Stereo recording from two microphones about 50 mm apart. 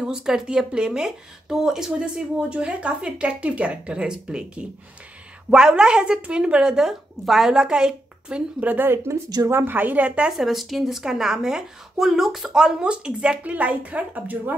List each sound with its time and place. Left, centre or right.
0.0 s a woman's voice: centre
6.9 s speech: centre
8.6 s a woman's voice: right
8.9 s speech: right
9.7 s a woman's voice: right
10.3 s a woman's voice: centre; by 14.5 s right